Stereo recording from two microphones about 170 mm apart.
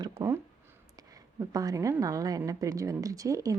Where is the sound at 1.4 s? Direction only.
20° right (ahead or behind).